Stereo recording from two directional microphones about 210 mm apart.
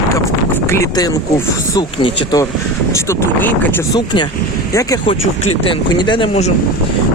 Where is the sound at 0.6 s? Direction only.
15° left (ahead or behind).